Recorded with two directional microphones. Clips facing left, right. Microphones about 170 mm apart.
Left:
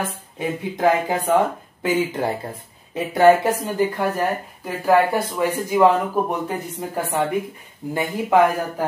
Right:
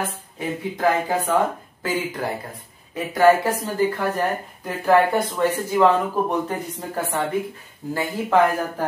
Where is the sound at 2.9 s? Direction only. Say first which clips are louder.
Left 2 dB; 25° left (ahead or behind).